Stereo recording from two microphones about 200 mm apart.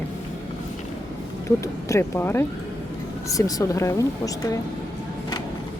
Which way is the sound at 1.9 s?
10° left (ahead or behind).